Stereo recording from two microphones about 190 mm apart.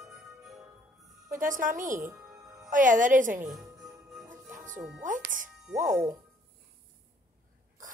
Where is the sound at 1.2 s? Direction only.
45° right (ahead or behind).